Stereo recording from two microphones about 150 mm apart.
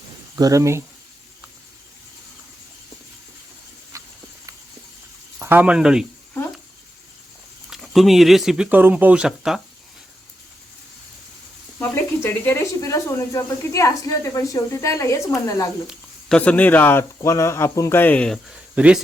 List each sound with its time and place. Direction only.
0.3 s speech: 20° right (ahead or behind)
3.9 s insect: 20° right (ahead or behind)
5.4 s speech: 15° right (ahead or behind)
7.7 s speech: centre (ahead or behind)
11.8 s speech: 15° left (ahead or behind)
16.3 s speech: 10° left (ahead or behind)
18.4 s speech: 5° right (ahead or behind)